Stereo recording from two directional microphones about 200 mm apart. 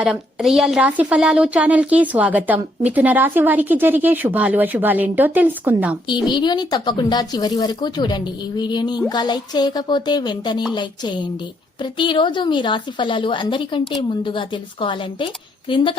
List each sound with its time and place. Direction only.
0.0 s a woman's voice: 5° right (ahead or behind)
6.2 s speech: 20° left (ahead or behind)